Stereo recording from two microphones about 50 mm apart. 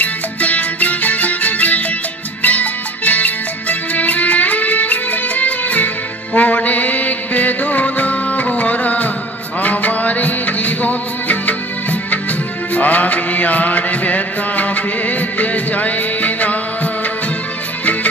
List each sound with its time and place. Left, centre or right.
0.0 s music: left